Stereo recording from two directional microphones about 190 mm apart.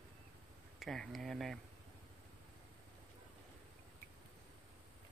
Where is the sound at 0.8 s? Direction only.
Centre (ahead or behind).